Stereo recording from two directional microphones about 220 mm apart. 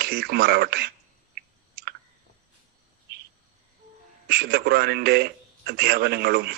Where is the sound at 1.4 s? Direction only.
45° right (ahead or behind).